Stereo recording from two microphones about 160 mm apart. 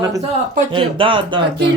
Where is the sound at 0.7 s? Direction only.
35° right (ahead or behind).